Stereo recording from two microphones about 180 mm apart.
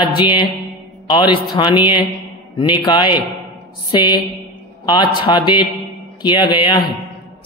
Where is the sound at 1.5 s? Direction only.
25° left (ahead or behind).